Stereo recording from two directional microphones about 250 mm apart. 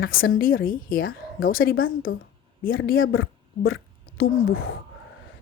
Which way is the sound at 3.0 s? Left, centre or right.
Left.